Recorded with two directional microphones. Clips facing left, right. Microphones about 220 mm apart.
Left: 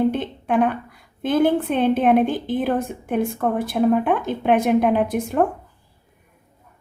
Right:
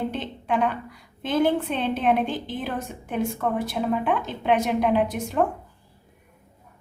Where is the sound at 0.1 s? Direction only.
55° left (ahead or behind).